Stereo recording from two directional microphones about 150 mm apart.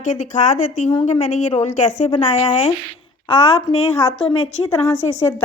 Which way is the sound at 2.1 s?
40° left (ahead or behind).